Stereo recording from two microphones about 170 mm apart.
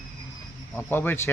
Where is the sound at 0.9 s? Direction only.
10° left (ahead or behind).